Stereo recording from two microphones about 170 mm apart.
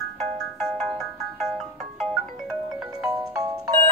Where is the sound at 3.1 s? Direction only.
20° right (ahead or behind).